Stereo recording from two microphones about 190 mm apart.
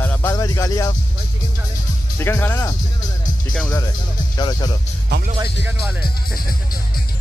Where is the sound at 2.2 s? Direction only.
10° left (ahead or behind).